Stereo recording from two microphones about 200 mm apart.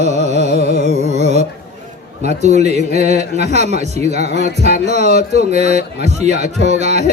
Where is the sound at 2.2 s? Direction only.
35° right (ahead or behind).